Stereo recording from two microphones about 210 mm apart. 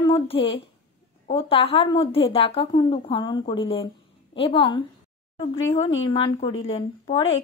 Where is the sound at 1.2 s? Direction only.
25° left (ahead or behind).